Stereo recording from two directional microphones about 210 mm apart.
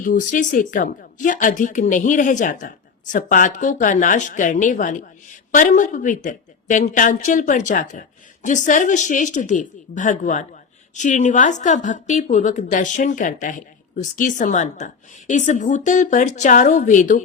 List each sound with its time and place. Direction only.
0.0 s speech: 40° left (ahead or behind)